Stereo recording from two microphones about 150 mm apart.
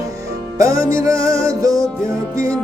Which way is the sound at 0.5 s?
20° right (ahead or behind).